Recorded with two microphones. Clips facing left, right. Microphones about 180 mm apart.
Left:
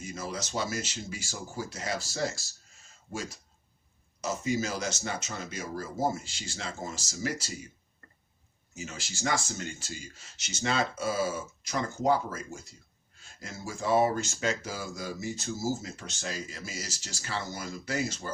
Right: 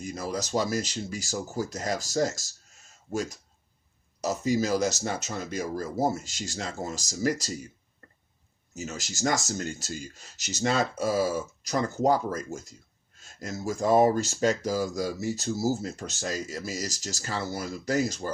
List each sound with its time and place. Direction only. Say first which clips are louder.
0.0 s speech: right 5 dB; 40° right (ahead or behind)
4.2 s speech: right 4 dB; 40° right (ahead or behind)
8.7 s speech: right 5 dB; 40° right (ahead or behind)